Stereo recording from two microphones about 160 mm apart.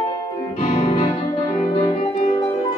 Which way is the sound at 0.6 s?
35° left (ahead or behind).